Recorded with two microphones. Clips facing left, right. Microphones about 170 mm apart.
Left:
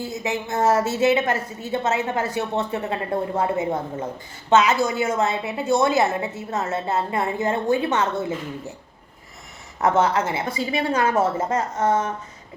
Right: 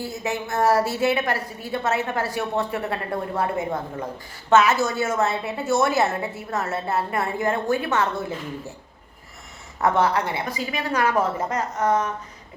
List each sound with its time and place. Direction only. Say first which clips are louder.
0.0 s a woman's voice: left 1 dB; 20° left (ahead or behind)
9.8 s a woman's voice: left 1 dB; 20° left (ahead or behind)